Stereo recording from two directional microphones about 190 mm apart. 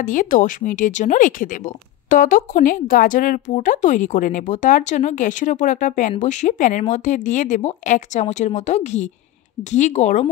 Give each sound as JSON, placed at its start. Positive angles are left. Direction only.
{"t": 0.0, "sound": "speech", "side_deg": 45}